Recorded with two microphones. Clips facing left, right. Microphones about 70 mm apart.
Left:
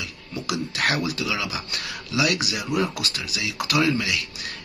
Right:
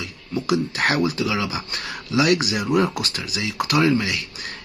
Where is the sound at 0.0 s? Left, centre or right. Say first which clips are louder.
Right 5 dB; right.